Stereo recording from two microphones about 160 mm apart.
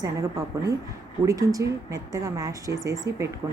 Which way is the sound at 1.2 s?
20° right (ahead or behind).